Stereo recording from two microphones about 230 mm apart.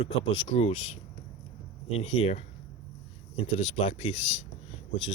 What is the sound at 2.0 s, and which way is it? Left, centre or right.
Speech, left.